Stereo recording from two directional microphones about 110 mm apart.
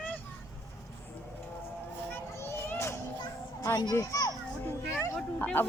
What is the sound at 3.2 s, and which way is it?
Children playing, 40° left (ahead or behind).